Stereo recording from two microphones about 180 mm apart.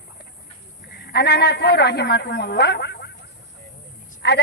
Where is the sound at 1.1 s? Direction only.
65° left (ahead or behind).